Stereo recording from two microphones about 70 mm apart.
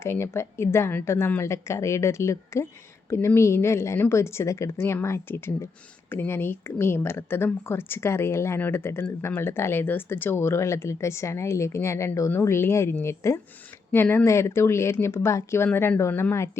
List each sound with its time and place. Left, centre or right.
0.0 s speech: left
13.9 s speech: left
14.3 s speech: left
15.6 s speech: left